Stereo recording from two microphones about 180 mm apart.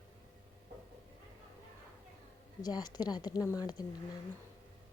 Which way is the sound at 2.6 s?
20° left (ahead or behind).